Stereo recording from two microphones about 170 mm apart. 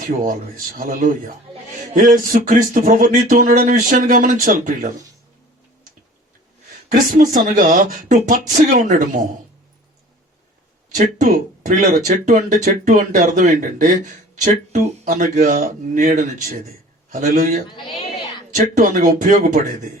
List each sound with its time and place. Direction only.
0.0 s speech: 50° right (ahead or behind)
6.8 s speech: 45° right (ahead or behind)
10.9 s speech: 55° right (ahead or behind)